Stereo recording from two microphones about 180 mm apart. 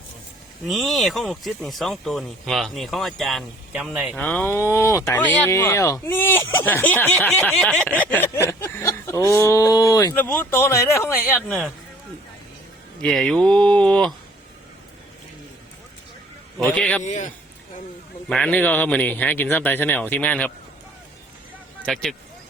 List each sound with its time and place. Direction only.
0.6 s speech: centre (ahead or behind)
11.3 s speech: centre (ahead or behind)
13.0 s speech: 5° left (ahead or behind)
16.6 s speech: 5° left (ahead or behind)
17.0 s a man's voice: 45° left (ahead or behind)
18.3 s speech: 5° left (ahead or behind)